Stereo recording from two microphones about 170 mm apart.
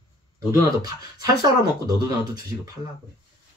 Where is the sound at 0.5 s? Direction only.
20° right (ahead or behind).